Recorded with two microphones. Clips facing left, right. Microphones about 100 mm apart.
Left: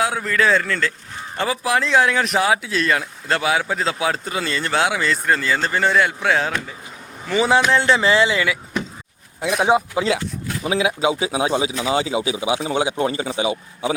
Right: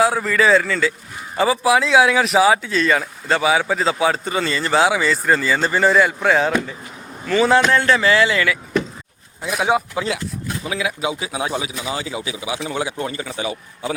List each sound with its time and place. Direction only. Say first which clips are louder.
0.0 s speech: right 3 dB; centre (ahead or behind)
7.3 s a man's voice: right 2 dB; 15° left (ahead or behind)